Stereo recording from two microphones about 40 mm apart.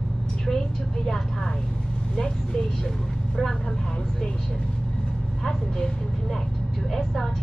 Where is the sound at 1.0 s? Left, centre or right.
Centre.